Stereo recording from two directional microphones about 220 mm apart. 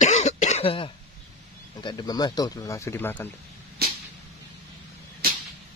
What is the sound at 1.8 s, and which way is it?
Speech, 20° left (ahead or behind).